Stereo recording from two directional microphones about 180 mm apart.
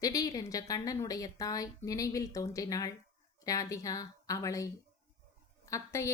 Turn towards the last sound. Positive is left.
turn(degrees=15)  # may be behind; listen again after turning